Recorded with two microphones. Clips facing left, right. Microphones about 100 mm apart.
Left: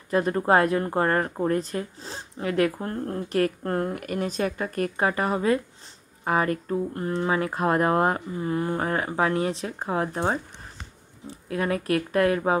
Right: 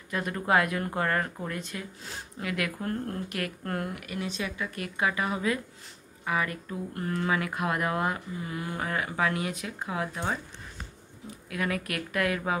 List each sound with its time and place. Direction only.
0.1 s speech: 35° left (ahead or behind)